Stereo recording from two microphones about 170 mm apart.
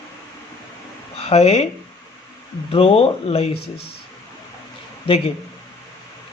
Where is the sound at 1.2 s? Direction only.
35° left (ahead or behind).